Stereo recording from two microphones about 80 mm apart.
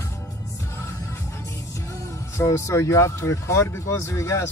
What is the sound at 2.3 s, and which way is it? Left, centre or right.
Speech, left.